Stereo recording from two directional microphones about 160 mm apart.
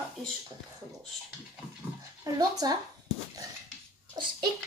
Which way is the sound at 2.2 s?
25° right (ahead or behind).